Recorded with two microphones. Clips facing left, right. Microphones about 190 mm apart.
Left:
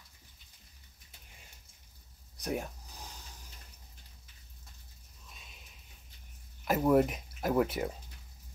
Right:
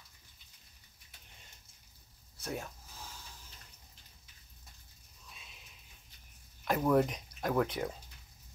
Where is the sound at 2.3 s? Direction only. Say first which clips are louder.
Left 5 dB; 15° left (ahead or behind).